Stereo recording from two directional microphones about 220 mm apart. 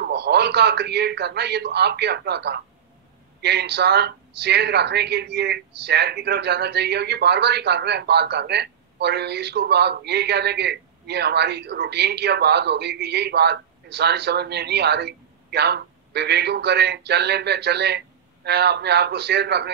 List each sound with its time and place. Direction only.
0.0 s speech: 50° right (ahead or behind)